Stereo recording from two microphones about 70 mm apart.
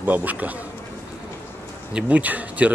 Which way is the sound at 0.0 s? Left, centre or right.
Right.